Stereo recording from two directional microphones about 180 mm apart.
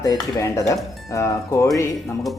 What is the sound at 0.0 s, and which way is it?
Speech, 20° left (ahead or behind).